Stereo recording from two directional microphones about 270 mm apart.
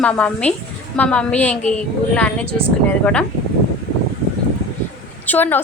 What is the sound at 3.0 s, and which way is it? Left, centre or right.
Speech, centre.